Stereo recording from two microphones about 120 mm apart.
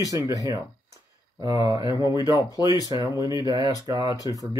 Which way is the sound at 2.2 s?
30° left (ahead or behind).